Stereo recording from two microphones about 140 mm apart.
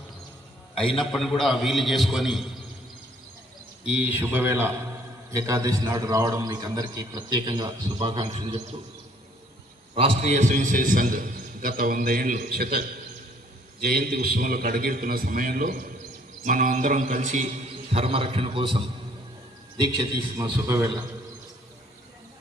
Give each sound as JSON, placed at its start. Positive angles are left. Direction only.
{"t": 0.8, "sound": "a man's voice", "side_deg": 0}
{"t": 3.8, "sound": "a man's voice", "side_deg": -10}
{"t": 8.2, "sound": "a man's voice", "side_deg": -40}
{"t": 9.9, "sound": "a man's voice", "side_deg": -45}
{"t": 13.8, "sound": "a man's voice", "side_deg": -90}
{"t": 16.4, "sound": "music", "side_deg": -70}
{"t": 17.9, "sound": "a man's voice", "side_deg": -40}
{"t": 20.3, "sound": "a man's voice", "side_deg": -20}